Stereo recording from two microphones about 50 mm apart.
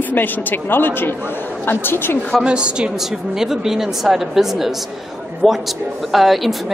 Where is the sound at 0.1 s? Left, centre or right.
Left.